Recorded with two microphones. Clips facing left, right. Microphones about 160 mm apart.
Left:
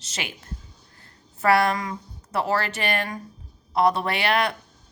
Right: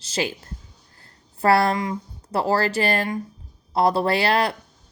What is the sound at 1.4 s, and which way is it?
A woman's voice, 30° right (ahead or behind).